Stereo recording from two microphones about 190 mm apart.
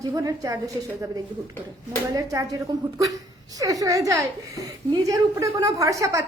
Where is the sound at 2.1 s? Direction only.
20° right (ahead or behind).